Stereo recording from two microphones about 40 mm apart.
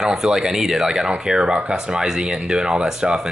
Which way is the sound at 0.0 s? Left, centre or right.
Centre.